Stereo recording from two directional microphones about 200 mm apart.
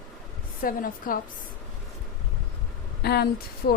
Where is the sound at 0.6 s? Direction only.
45° left (ahead or behind).